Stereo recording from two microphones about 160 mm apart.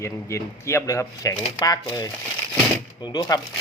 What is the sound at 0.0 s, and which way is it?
A man's voice, 15° left (ahead or behind).